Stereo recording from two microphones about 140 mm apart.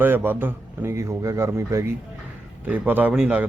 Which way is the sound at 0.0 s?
15° right (ahead or behind).